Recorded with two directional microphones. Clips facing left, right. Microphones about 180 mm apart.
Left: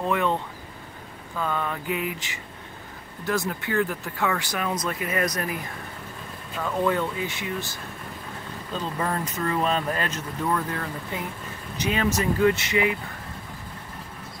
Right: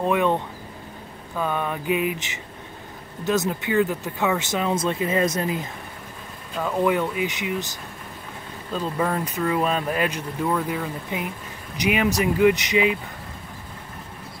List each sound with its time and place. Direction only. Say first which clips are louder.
0.0 s vehicle: right 3 dB; 15° right (ahead or behind)
1.3 s speech: right 2 dB; 15° right (ahead or behind)